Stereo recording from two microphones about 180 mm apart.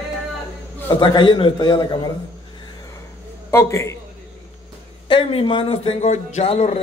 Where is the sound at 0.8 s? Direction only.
20° left (ahead or behind).